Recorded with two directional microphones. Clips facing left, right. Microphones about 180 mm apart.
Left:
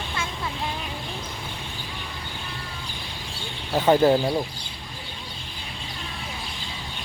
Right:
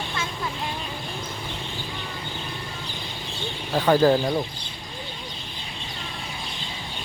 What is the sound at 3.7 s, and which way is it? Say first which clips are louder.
Speech: even; 20° left (ahead or behind).